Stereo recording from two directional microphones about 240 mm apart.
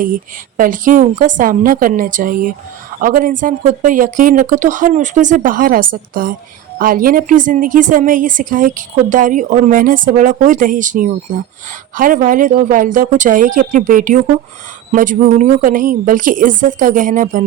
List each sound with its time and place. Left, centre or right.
0.0 s a woman's voice: right